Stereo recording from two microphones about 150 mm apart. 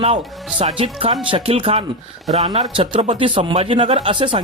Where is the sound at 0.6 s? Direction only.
35° right (ahead or behind).